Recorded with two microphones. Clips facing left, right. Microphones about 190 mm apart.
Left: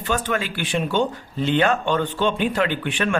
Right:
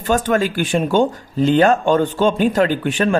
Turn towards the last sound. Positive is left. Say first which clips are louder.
# right 6 dB
turn(degrees=-40)  # may be behind; listen again after turning